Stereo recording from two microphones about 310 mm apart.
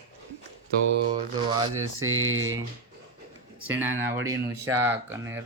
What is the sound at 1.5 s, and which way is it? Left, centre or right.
Speech, centre.